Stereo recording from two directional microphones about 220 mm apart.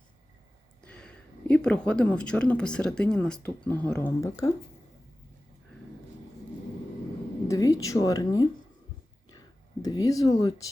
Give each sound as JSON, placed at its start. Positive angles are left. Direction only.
{"t": 0.9, "sound": "speech", "side_deg": 5}
{"t": 7.4, "sound": "a sound", "side_deg": 15}
{"t": 9.8, "sound": "speech", "side_deg": 15}